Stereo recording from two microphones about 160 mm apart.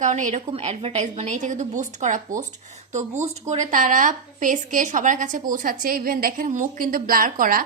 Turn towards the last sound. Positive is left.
turn(degrees=-60)  # may be behind; listen again after turning